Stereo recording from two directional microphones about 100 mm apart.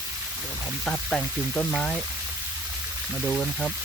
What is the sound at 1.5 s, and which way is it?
Speech, 20° left (ahead or behind).